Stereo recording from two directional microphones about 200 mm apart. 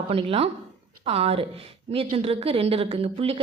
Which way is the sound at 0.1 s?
30° right (ahead or behind).